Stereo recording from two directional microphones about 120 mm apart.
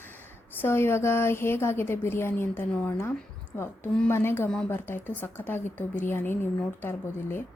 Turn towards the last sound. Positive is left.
turn(degrees=20)  # may be behind; listen again after turning